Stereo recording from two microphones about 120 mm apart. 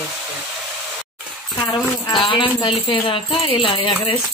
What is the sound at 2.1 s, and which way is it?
Speech, 40° left (ahead or behind).